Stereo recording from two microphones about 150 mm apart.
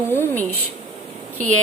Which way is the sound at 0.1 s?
15° left (ahead or behind).